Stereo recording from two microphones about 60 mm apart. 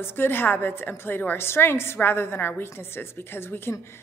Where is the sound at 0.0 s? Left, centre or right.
Left.